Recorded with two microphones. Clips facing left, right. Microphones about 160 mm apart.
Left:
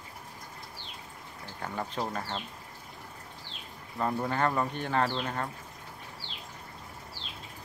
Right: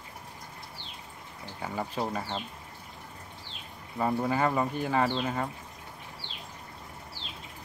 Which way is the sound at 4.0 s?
5° right (ahead or behind).